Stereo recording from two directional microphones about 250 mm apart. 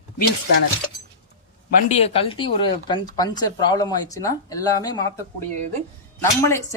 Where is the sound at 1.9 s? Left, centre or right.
Left.